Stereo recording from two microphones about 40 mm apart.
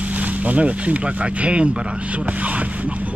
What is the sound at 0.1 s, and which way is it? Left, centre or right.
Speech, right.